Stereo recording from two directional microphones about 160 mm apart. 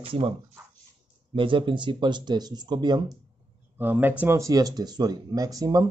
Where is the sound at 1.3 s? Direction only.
30° right (ahead or behind).